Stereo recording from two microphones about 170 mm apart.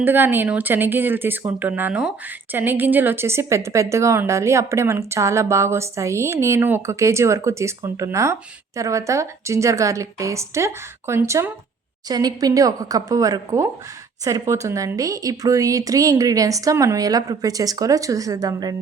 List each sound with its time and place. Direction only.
0.0 s speech: 10° right (ahead or behind)